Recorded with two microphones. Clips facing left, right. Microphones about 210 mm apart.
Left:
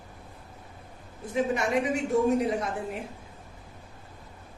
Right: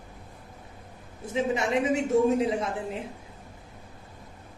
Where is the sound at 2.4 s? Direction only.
25° right (ahead or behind).